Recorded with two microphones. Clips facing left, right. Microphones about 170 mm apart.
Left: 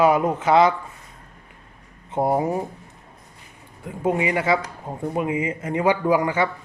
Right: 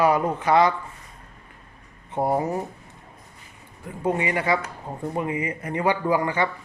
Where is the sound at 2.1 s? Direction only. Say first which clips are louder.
Left 2 dB; 20° left (ahead or behind).